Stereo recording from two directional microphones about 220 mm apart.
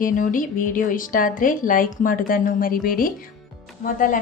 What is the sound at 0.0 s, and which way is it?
Speech, 35° left (ahead or behind).